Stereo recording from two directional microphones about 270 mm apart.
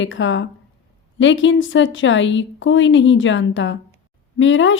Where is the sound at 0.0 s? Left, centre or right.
Left.